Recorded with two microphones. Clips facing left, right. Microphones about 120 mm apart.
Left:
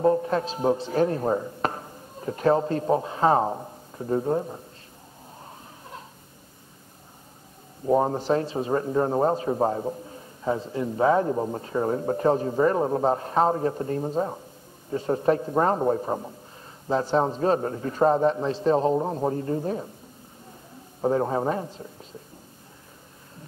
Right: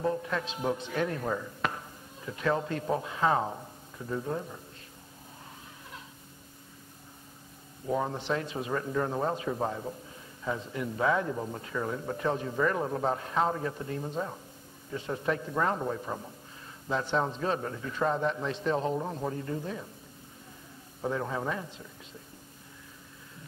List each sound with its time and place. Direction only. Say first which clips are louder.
0.0 s a man's voice: left 9 dB; 35° left (ahead or behind)
7.8 s speech: left 9 dB; 40° left (ahead or behind)
21.0 s speech: left 9 dB; 40° left (ahead or behind)